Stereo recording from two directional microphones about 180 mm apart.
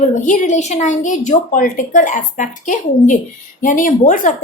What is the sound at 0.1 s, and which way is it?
A woman's voice, 45° left (ahead or behind).